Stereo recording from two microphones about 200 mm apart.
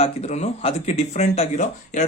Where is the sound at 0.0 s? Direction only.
30° left (ahead or behind).